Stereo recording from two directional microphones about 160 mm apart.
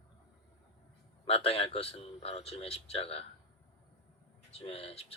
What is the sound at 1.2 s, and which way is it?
Speech, 40° left (ahead or behind).